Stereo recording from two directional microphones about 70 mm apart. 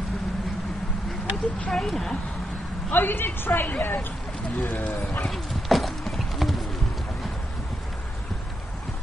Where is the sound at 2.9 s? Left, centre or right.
Left.